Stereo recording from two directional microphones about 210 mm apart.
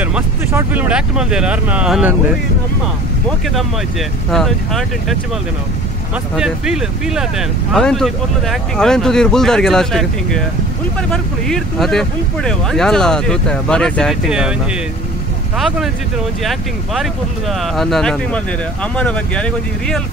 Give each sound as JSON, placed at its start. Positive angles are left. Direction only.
{"t": 0.0, "sound": "speech", "side_deg": -10}
{"t": 4.3, "sound": "speech", "side_deg": 0}
{"t": 6.3, "sound": "speech", "side_deg": 0}
{"t": 15.5, "sound": "speech", "side_deg": 0}